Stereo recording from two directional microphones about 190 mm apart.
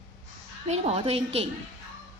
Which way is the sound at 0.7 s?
30° right (ahead or behind).